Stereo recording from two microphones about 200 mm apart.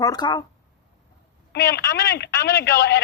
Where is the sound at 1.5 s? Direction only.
55° left (ahead or behind).